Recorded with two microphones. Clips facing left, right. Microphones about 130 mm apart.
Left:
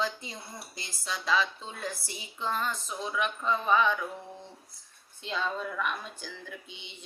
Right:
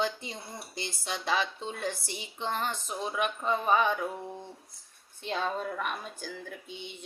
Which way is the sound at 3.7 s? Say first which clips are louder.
Left 1 dB; 30° right (ahead or behind).